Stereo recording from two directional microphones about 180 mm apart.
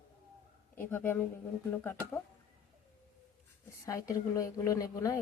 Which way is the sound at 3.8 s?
20° left (ahead or behind).